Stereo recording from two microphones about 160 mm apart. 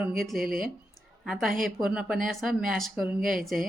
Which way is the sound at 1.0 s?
Centre (ahead or behind).